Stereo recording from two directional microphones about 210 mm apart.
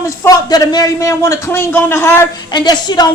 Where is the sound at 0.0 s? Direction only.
15° left (ahead or behind).